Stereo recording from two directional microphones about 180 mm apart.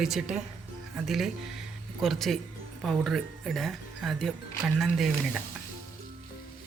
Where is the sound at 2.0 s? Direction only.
Centre (ahead or behind).